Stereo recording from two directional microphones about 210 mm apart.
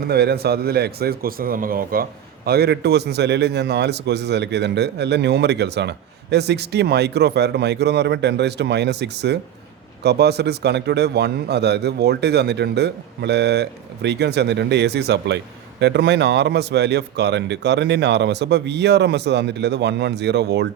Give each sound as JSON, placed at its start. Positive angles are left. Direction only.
{"t": 0.1, "sound": "a man's voice", "side_deg": -50}